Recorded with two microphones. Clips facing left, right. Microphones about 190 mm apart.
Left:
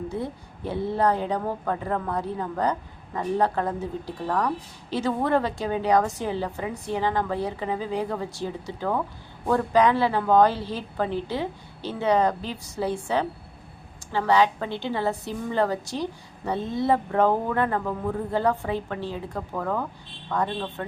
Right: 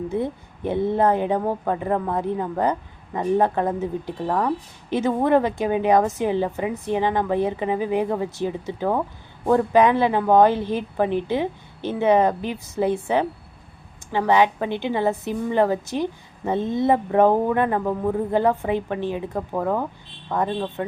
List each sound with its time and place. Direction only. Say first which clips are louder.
0.2 s speech: right 5 dB; 20° right (ahead or behind)